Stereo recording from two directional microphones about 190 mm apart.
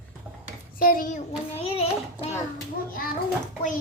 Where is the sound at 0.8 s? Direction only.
45° left (ahead or behind).